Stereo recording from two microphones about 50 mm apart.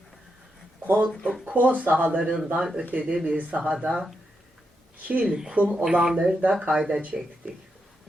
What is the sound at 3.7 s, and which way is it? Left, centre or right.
Speech, centre.